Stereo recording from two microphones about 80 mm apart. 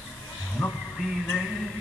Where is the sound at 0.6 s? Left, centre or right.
Centre.